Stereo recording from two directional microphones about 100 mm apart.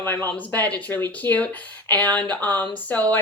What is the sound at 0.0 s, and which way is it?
Speech, 20° left (ahead or behind).